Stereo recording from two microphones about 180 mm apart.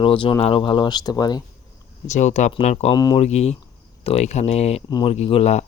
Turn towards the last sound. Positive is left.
turn(degrees=35)  # may be behind; listen again after turning